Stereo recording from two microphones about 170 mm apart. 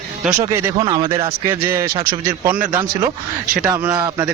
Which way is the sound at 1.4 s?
15° right (ahead or behind).